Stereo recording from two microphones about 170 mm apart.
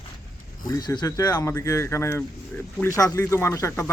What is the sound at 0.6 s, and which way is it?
Speech, 20° left (ahead or behind).